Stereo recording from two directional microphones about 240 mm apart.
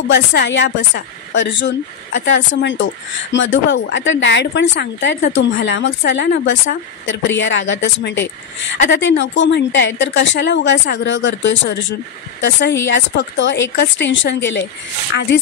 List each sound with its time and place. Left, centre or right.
0.1 s speech: left